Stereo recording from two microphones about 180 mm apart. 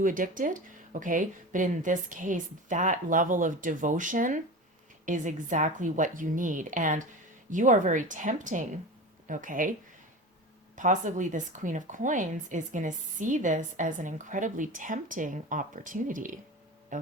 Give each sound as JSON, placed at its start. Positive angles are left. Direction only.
{"t": 0.0, "sound": "speech", "side_deg": -50}
{"t": 10.8, "sound": "speech", "side_deg": -45}
{"t": 16.9, "sound": "music", "side_deg": -45}